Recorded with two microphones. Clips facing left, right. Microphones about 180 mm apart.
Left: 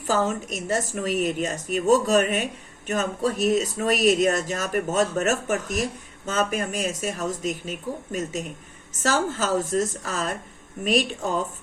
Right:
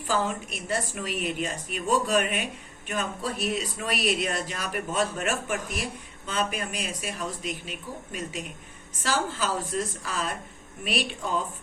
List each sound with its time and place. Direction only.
0.1 s a woman's voice: 45° left (ahead or behind)